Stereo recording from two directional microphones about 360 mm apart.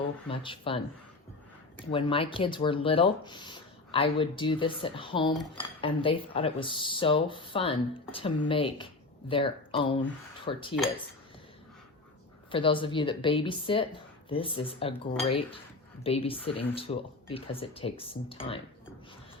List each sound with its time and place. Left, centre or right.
0.3 s speech: centre
1.9 s speech: centre
5.3 s speech: centre
5.8 s speech: centre
12.5 s speech: centre
16.0 s speech: centre